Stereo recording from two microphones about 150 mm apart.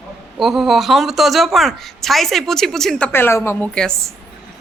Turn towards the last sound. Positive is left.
turn(degrees=15)  # may be behind; listen again after turning